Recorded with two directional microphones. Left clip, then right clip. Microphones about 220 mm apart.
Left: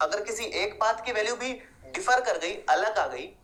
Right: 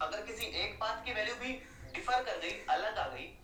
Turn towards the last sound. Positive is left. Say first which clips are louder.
# left 9 dB
turn(degrees=45)  # may be behind; listen again after turning